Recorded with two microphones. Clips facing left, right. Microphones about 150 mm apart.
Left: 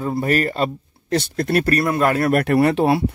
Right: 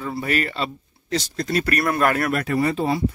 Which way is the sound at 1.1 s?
60° left (ahead or behind).